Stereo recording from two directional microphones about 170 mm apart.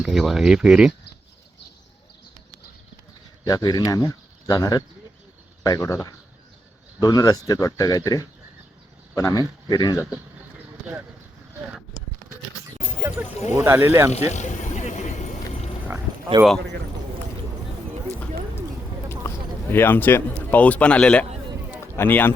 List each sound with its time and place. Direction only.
0.0 s speech: centre (ahead or behind)
3.4 s speech: 20° left (ahead or behind)
13.0 s a sound: 10° right (ahead or behind)
13.5 s speech: 15° right (ahead or behind)
14.3 s vehicle: 45° left (ahead or behind)
16.4 s speech: 20° right (ahead or behind)
19.7 s speech: 10° left (ahead or behind)